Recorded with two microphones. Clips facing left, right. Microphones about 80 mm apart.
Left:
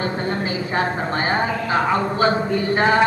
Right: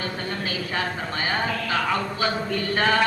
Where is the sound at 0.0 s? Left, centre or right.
Left.